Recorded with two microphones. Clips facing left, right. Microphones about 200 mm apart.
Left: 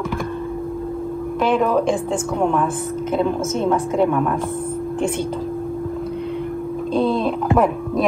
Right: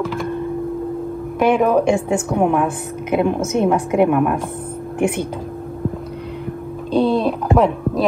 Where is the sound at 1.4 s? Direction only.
55° right (ahead or behind).